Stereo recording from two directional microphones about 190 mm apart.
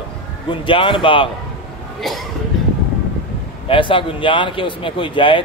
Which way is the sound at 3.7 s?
25° left (ahead or behind).